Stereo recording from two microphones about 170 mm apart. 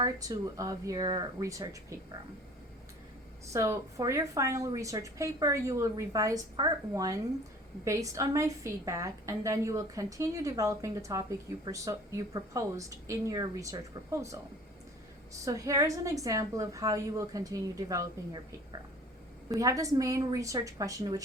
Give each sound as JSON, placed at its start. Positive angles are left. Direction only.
{"t": 0.0, "sound": "a woman's voice", "side_deg": -20}
{"t": 3.4, "sound": "a woman's voice", "side_deg": -15}
{"t": 19.5, "sound": "a woman's voice", "side_deg": -20}